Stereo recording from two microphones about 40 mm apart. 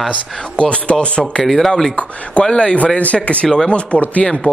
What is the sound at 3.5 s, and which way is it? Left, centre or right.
Speech, left.